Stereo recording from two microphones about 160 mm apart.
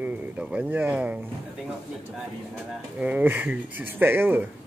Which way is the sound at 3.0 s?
10° right (ahead or behind).